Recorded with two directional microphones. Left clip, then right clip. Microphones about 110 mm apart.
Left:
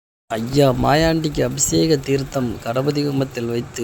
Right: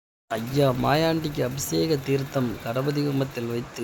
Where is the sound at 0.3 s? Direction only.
35° left (ahead or behind).